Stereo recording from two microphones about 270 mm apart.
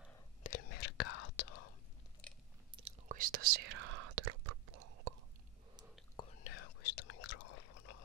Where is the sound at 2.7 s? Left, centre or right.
Right.